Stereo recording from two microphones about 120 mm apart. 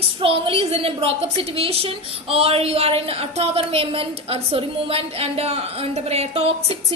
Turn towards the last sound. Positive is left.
turn(degrees=-55)  # may be behind; listen again after turning